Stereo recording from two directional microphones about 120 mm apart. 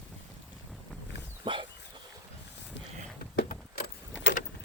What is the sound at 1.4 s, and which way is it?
Dog, 45° right (ahead or behind).